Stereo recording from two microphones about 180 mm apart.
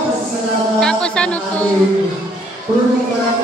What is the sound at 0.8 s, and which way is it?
Music, 5° left (ahead or behind).